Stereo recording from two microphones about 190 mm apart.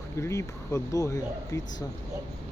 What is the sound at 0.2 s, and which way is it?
Speech, 15° left (ahead or behind).